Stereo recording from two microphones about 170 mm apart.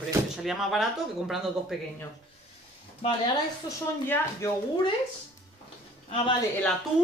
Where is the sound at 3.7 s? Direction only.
15° left (ahead or behind).